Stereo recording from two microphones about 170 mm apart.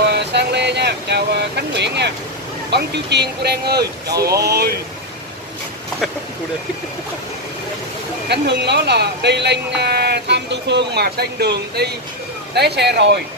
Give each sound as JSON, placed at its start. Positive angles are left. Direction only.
{"t": 0.1, "sound": "vehicle", "side_deg": -80}
{"t": 2.7, "sound": "speech", "side_deg": -80}
{"t": 8.3, "sound": "speech", "side_deg": -80}